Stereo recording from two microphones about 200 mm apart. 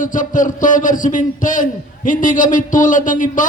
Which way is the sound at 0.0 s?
40° left (ahead or behind).